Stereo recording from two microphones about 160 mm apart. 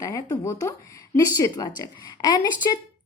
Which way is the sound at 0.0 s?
20° left (ahead or behind).